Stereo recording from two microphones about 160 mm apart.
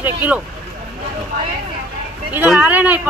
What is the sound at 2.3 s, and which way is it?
Speech, 10° right (ahead or behind).